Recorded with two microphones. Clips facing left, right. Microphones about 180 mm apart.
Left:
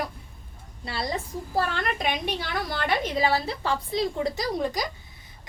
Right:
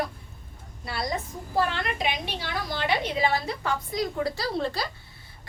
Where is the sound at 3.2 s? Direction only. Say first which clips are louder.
Left 1 dB; 35° left (ahead or behind).